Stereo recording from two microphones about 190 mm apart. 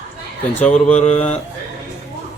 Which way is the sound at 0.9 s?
35° left (ahead or behind).